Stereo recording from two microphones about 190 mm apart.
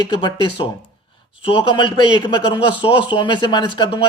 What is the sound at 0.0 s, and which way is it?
A man's voice, 25° left (ahead or behind).